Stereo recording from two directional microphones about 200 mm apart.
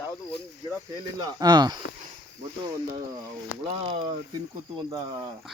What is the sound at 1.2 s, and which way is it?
Speech, 20° right (ahead or behind).